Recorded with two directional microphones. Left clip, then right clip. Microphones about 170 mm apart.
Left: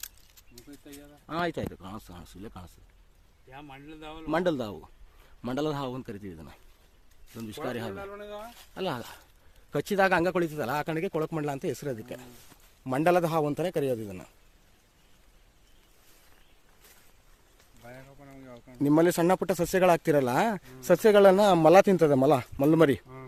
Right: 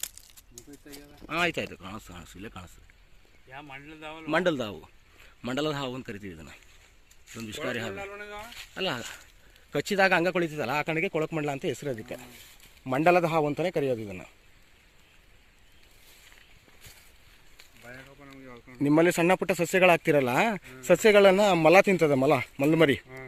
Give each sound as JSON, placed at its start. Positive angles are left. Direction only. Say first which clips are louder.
{"t": 1.3, "sound": "speech", "louder": "right 3 dB", "side_deg": 0}
{"t": 3.5, "sound": "speech", "louder": "right 2 dB", "side_deg": 15}
{"t": 17.8, "sound": "a sound", "louder": "right 1 dB", "side_deg": 80}
{"t": 18.8, "sound": "speech", "louder": "right 1 dB", "side_deg": 10}